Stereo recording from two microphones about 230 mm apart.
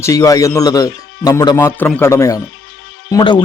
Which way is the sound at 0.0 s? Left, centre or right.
Centre.